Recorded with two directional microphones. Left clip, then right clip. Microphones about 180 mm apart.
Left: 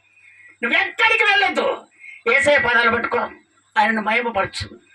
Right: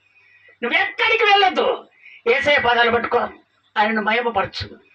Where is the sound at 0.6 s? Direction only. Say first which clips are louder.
Left 1 dB; 10° left (ahead or behind).